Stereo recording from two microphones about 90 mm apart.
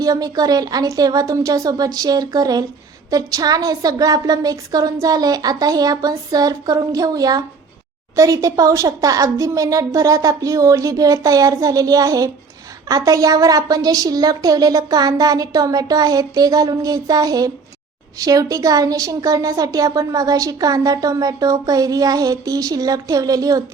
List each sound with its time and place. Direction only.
0.0 s a woman's voice: 40° right (ahead or behind)